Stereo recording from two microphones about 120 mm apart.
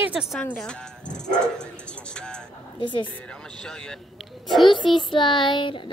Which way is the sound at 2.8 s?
40° left (ahead or behind).